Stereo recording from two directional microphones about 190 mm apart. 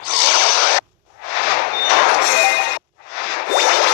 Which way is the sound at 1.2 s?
45° left (ahead or behind).